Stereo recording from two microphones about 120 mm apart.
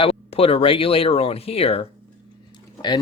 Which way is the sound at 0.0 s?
55° left (ahead or behind).